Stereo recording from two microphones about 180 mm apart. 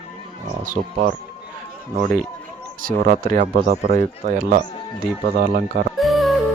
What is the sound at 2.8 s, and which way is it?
Speech, 45° right (ahead or behind).